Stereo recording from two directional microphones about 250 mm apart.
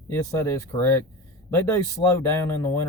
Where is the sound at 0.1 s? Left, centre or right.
Centre.